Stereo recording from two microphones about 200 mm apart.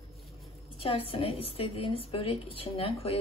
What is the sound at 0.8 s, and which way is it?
A woman's voice, 30° left (ahead or behind).